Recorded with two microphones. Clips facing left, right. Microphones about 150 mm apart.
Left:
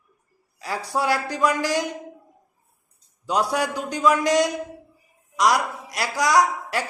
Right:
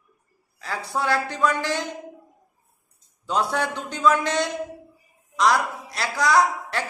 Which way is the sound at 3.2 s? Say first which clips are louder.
Left 1 dB; 10° left (ahead or behind).